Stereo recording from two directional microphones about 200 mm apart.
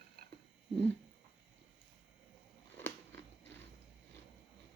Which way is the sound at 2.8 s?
10° left (ahead or behind).